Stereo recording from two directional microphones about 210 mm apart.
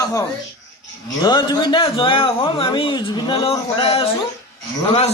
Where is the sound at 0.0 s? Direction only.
15° left (ahead or behind).